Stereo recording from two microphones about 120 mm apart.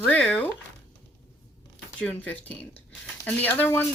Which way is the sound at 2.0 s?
15° left (ahead or behind).